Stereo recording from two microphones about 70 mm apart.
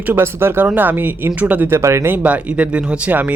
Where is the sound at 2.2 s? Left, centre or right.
Centre.